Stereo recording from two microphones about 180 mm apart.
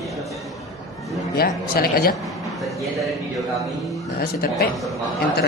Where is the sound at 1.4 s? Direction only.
55° left (ahead or behind).